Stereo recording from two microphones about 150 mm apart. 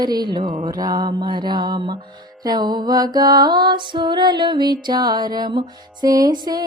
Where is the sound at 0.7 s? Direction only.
25° right (ahead or behind).